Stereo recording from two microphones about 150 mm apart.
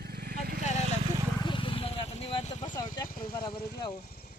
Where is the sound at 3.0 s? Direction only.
70° left (ahead or behind).